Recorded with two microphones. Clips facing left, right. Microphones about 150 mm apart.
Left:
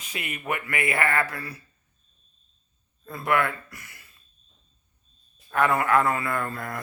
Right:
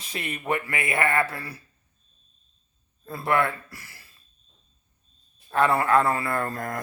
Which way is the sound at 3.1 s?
30° right (ahead or behind).